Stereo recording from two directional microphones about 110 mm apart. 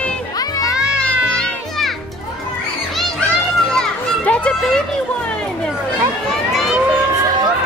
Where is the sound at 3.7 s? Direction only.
10° left (ahead or behind).